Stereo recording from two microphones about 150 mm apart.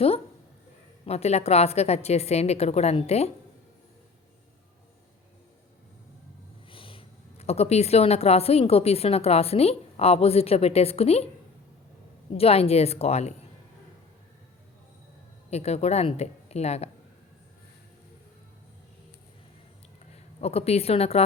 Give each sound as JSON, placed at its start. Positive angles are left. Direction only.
{"t": 1.0, "sound": "a woman's voice", "side_deg": 45}
{"t": 6.7, "sound": "speech", "side_deg": 35}
{"t": 12.3, "sound": "a woman's voice", "side_deg": 40}
{"t": 15.4, "sound": "a woman's voice", "side_deg": 45}
{"t": 20.4, "sound": "a woman's voice", "side_deg": 45}